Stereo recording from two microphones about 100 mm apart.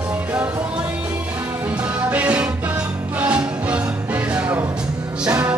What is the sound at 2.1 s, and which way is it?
Music, 15° right (ahead or behind).